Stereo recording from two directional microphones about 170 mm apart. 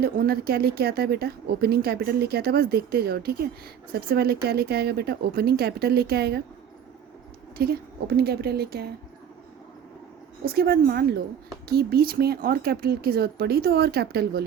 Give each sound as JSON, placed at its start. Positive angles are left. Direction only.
{"t": 0.0, "sound": "a woman's voice", "side_deg": -65}
{"t": 7.6, "sound": "a woman's voice", "side_deg": -65}
{"t": 10.4, "sound": "speech", "side_deg": -65}